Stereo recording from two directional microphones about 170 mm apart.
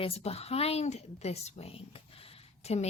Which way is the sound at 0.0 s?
35° left (ahead or behind).